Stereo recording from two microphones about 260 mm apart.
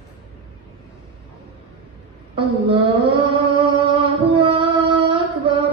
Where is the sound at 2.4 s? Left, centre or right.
Centre.